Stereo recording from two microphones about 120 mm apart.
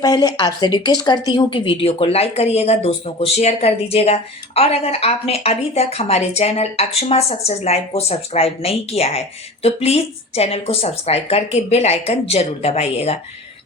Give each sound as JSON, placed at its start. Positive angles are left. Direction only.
{"t": 0.0, "sound": "a woman's voice", "side_deg": 35}